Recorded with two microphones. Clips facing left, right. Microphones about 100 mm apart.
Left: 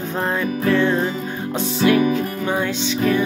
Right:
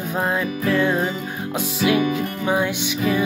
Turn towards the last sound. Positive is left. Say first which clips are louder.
# left 2 dB
turn(degrees=-10)  # may be behind; listen again after turning